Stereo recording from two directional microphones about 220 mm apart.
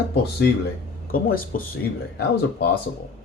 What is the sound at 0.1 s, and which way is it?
Speech, 50° left (ahead or behind).